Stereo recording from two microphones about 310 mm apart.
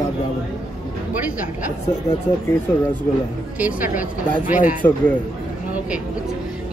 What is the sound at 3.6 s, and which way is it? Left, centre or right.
A woman's voice, centre.